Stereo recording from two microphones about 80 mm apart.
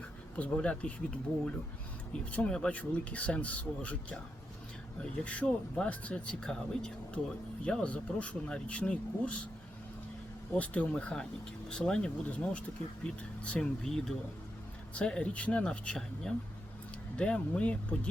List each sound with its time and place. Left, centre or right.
0.3 s speech: centre
2.3 s speech: centre
5.2 s speech: centre
10.6 s speech: centre